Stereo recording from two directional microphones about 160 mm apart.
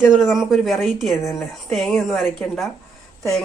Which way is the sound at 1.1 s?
15° left (ahead or behind).